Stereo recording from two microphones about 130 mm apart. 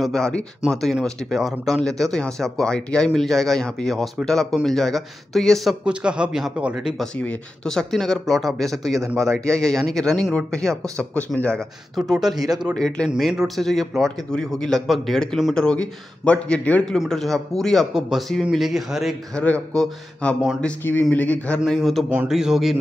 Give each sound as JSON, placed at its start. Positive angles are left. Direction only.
{"t": 0.0, "sound": "speech", "side_deg": 5}
{"t": 9.2, "sound": "a man's voice", "side_deg": -25}
{"t": 9.5, "sound": "a man's voice", "side_deg": 5}
{"t": 19.4, "sound": "a man's voice", "side_deg": 10}
{"t": 21.6, "sound": "speech", "side_deg": 0}